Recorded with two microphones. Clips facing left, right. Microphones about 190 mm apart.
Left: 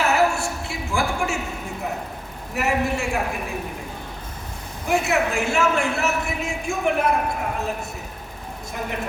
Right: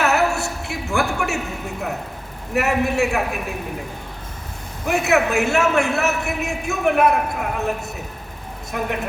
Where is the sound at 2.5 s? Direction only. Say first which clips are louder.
Right 3 dB; 65° right (ahead or behind).